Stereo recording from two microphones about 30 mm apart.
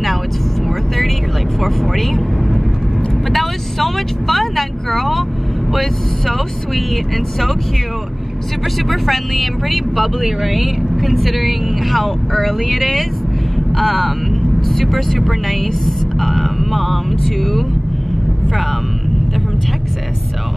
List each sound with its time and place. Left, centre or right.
0.7 s vehicle: centre
5.7 s speech: centre
8.8 s speech: centre